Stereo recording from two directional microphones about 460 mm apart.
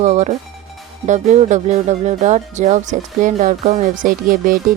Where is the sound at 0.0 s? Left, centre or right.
Centre.